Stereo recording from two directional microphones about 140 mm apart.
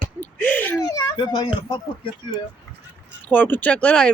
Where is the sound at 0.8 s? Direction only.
25° left (ahead or behind).